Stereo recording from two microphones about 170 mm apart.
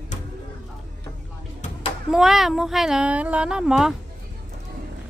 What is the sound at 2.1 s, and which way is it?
Speech, centre (ahead or behind).